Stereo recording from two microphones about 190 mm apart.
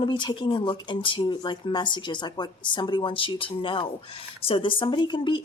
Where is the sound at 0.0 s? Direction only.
25° left (ahead or behind).